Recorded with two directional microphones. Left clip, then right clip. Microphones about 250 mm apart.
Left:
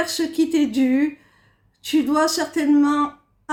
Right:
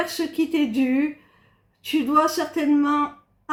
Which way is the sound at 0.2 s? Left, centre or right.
Left.